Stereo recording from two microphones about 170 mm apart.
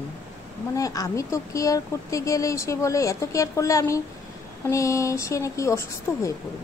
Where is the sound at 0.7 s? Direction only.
20° left (ahead or behind).